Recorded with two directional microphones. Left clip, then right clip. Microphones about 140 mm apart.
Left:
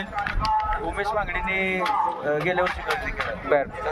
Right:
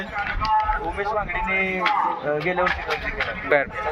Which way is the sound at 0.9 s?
35° left (ahead or behind).